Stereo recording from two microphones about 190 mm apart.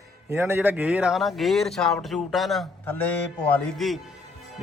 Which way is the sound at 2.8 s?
10° left (ahead or behind).